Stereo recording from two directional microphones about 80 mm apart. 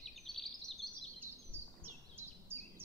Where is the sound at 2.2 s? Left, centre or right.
Right.